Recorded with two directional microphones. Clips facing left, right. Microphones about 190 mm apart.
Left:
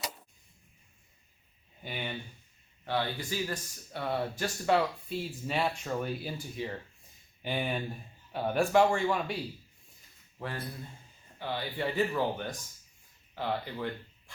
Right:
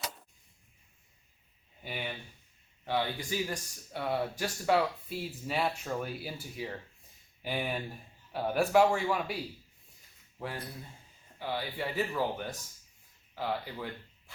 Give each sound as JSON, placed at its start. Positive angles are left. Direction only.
{"t": 1.8, "sound": "speech", "side_deg": -5}